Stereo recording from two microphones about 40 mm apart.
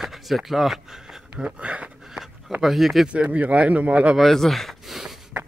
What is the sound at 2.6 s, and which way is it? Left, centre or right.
Speech, centre.